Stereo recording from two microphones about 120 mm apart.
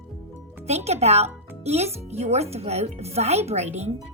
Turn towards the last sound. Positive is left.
turn(degrees=-65)  # may be behind; listen again after turning